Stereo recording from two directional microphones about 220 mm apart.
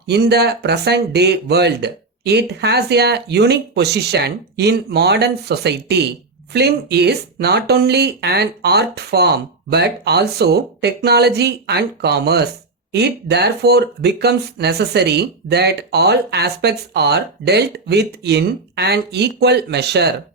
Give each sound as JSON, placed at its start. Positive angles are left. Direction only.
{"t": 0.1, "sound": "speech", "side_deg": -50}